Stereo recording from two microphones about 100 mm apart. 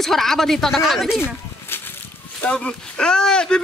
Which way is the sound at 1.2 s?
20° left (ahead or behind).